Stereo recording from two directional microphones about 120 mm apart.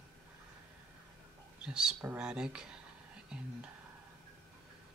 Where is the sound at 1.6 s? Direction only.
5° right (ahead or behind).